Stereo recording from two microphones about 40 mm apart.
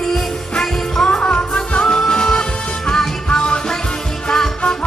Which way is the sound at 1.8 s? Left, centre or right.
Centre.